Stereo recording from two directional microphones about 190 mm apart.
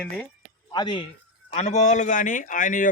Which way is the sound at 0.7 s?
25° left (ahead or behind).